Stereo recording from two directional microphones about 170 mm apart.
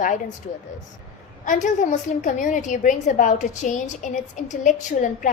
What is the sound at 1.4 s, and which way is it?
A woman's voice, 45° left (ahead or behind).